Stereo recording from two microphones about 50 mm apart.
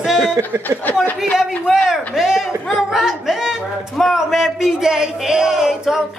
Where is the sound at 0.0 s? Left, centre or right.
Centre.